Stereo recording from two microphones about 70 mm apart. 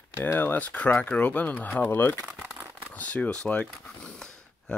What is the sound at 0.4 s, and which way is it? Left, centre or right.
Speech, left.